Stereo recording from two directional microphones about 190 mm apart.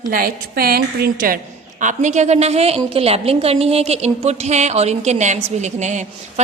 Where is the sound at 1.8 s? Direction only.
40° right (ahead or behind).